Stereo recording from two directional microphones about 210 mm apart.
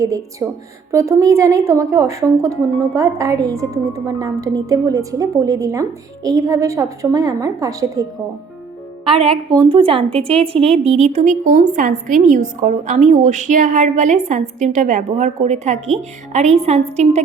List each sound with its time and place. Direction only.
0.0 s a woman's voice: 15° right (ahead or behind)
9.0 s speech: 25° right (ahead or behind)